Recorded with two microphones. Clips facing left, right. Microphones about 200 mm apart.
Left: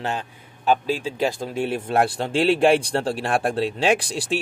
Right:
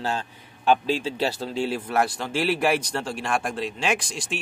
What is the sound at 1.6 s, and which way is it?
Speech, 30° left (ahead or behind).